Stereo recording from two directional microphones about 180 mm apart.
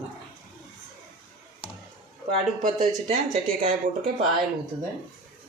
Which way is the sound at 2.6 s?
40° right (ahead or behind).